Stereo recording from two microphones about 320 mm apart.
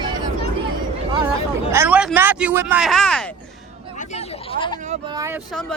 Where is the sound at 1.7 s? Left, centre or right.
Centre.